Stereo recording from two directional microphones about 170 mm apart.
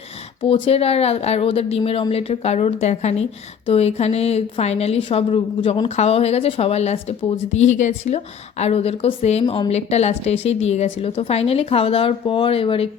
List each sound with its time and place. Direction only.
0.4 s a woman's voice: 30° left (ahead or behind)